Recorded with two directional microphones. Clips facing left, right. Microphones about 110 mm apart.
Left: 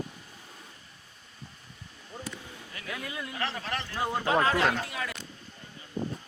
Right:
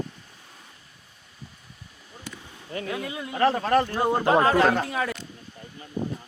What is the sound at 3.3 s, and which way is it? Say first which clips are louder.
Speech: right 15 dB; 40° right (ahead or behind).